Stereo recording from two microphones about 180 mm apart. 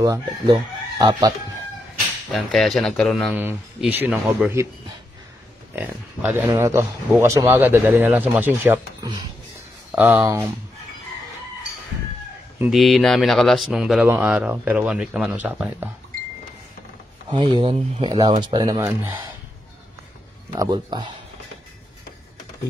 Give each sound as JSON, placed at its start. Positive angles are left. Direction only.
{"t": 0.0, "sound": "chicken", "side_deg": -20}
{"t": 2.3, "sound": "speech", "side_deg": 0}
{"t": 3.3, "sound": "speech", "side_deg": -10}
{"t": 9.8, "sound": "speech", "side_deg": -10}
{"t": 12.6, "sound": "speech", "side_deg": 0}
{"t": 17.3, "sound": "chicken", "side_deg": -25}
{"t": 20.5, "sound": "chicken", "side_deg": -20}